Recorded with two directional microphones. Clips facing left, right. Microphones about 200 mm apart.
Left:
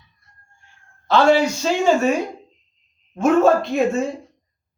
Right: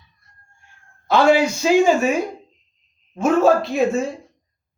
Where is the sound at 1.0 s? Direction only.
10° right (ahead or behind).